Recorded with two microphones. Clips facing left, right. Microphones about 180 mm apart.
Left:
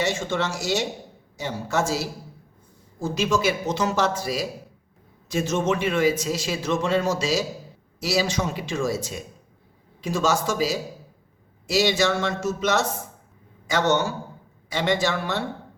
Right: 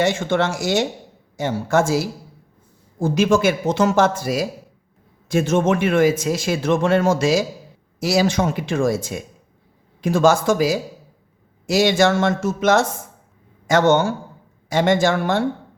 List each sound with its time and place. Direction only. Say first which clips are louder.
0.0 s speech: right 6 dB; 55° right (ahead or behind)
11.6 s speech: right 5 dB; 50° right (ahead or behind)